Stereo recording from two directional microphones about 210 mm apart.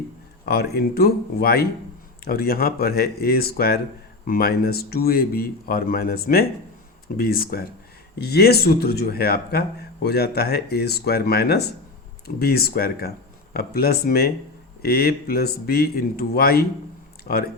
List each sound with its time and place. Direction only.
0.4 s speech: 50° left (ahead or behind)